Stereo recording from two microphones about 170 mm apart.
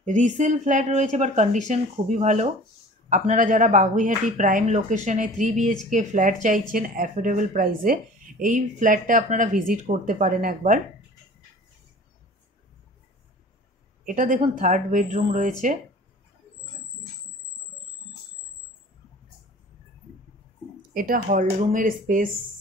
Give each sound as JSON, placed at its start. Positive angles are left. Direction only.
{"t": 0.0, "sound": "speech", "side_deg": -45}
{"t": 14.0, "sound": "speech", "side_deg": -50}
{"t": 20.9, "sound": "speech", "side_deg": -55}